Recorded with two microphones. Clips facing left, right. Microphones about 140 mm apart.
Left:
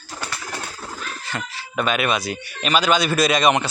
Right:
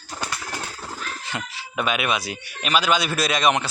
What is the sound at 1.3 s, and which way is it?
Speech, 10° right (ahead or behind).